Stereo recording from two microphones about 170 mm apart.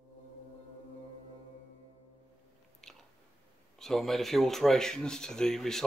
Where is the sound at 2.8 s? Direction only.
5° left (ahead or behind).